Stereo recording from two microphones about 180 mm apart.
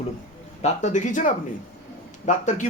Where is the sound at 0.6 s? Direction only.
40° left (ahead or behind).